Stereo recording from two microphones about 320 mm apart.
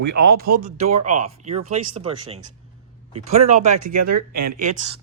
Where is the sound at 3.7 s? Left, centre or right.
Right.